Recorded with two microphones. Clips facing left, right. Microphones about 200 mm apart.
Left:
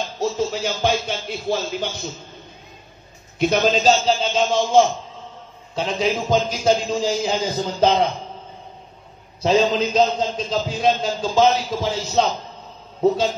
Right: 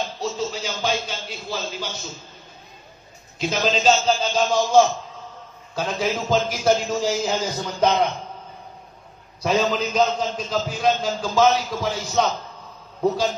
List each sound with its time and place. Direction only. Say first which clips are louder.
0.2 s speech: left 8 dB; 50° left (ahead or behind)
3.3 s speech: left 5 dB; 55° left (ahead or behind)
4.0 s a man's voice: left 1 dB; 25° left (ahead or behind)
7.6 s a man's voice: left 2 dB; 30° left (ahead or behind)
9.4 s a man's voice: left 4 dB; 25° left (ahead or behind)